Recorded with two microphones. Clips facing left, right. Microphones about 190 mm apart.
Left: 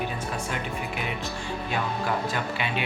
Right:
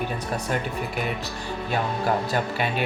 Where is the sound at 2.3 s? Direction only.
45° right (ahead or behind).